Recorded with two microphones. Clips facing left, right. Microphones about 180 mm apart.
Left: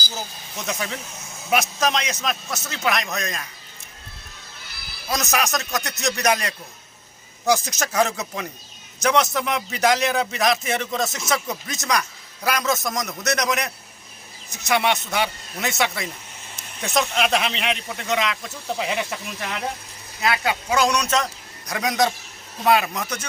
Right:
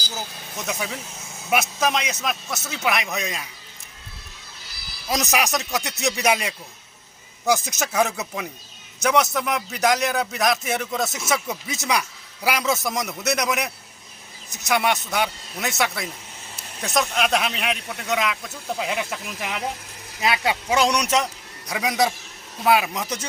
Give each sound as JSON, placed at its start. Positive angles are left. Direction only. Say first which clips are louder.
{"t": 0.6, "sound": "a man's voice", "louder": "left 1 dB", "side_deg": -5}
{"t": 4.6, "sound": "music", "louder": "left 1 dB", "side_deg": 60}
{"t": 5.0, "sound": "a man's voice", "louder": "right 1 dB", "side_deg": -15}
{"t": 7.5, "sound": "a man's voice", "louder": "left 1 dB", "side_deg": -5}
{"t": 20.2, "sound": "a man's voice", "louder": "even", "side_deg": -20}